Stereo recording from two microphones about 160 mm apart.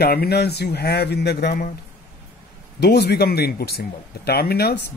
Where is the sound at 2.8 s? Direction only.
85° left.